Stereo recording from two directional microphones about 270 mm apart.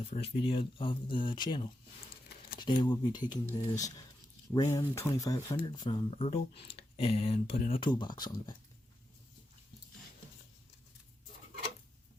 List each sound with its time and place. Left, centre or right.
0.0 s speech: left